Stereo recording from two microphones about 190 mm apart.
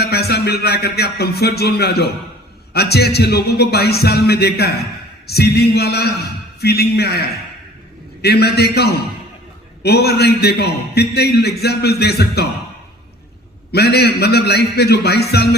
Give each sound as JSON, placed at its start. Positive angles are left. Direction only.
{"t": 0.0, "sound": "a man's voice", "side_deg": 60}
{"t": 13.7, "sound": "a man's voice", "side_deg": 60}